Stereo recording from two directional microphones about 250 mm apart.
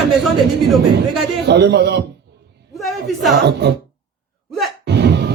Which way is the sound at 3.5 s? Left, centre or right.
Right.